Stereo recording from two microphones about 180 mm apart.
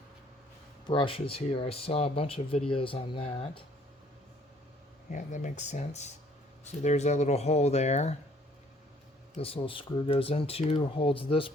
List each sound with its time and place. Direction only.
0.9 s speech: 30° left (ahead or behind)
5.1 s speech: 45° left (ahead or behind)
9.4 s speech: 30° left (ahead or behind)